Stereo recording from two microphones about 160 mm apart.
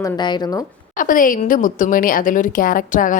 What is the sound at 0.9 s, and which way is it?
A woman's voice, 55° left (ahead or behind).